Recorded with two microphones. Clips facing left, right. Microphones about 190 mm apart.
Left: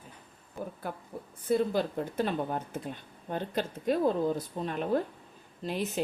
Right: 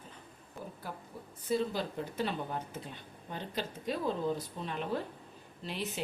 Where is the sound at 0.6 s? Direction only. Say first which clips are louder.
Left 6 dB; centre (ahead or behind).